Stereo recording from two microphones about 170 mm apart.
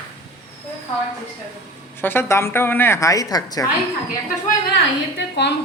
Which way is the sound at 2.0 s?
15° left (ahead or behind).